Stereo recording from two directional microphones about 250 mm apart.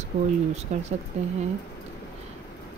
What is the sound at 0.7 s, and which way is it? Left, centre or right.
Speech, right.